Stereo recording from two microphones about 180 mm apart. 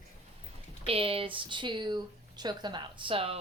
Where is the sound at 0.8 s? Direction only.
30° right (ahead or behind).